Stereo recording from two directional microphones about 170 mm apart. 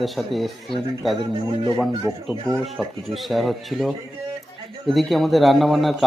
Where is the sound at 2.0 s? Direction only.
15° right (ahead or behind).